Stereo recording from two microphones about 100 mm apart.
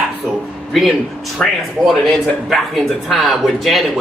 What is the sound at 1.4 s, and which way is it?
A man's voice, centre (ahead or behind).